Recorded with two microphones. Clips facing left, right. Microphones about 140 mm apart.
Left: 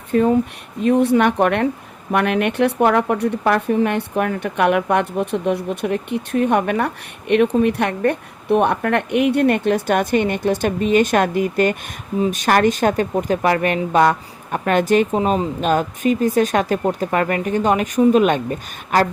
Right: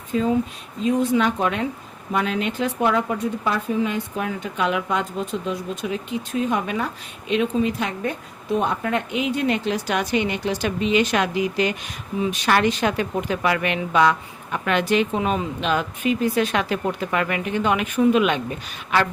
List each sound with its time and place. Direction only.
0.1 s a woman's voice: 60° left (ahead or behind)